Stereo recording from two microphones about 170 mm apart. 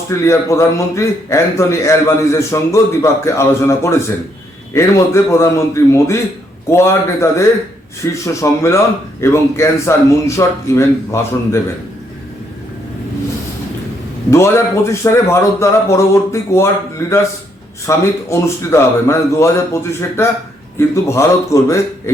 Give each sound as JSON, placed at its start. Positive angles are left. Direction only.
{"t": 0.1, "sound": "a man's voice", "side_deg": 15}
{"t": 14.3, "sound": "a man's voice", "side_deg": 15}